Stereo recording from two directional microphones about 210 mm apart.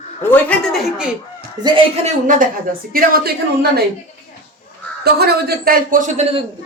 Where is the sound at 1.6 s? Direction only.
25° right (ahead or behind).